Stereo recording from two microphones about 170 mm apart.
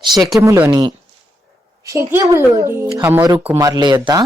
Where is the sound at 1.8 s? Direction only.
15° right (ahead or behind).